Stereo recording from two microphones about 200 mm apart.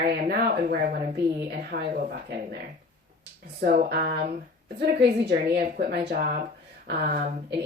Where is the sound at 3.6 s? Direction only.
50° right (ahead or behind).